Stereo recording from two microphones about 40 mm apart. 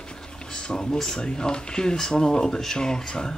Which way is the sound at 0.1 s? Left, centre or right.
Centre.